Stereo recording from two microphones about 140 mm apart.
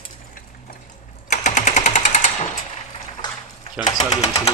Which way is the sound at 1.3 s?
60° left (ahead or behind).